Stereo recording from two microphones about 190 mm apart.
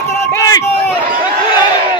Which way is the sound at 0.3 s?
20° left (ahead or behind).